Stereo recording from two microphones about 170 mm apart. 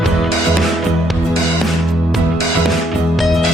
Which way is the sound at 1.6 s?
Centre (ahead or behind).